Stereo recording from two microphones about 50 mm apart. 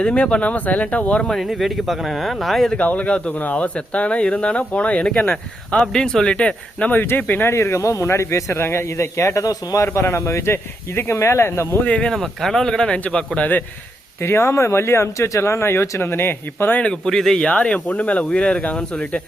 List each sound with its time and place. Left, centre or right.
0.0 s speech: left
1.3 s speech: centre
2.7 s speech: left
6.9 s speech: left
7.5 s a man's voice: left
11.9 s speech: centre
12.1 s speech: centre
13.4 s speech: left
14.2 s speech: left
16.8 s speech: centre
17.5 s speech: left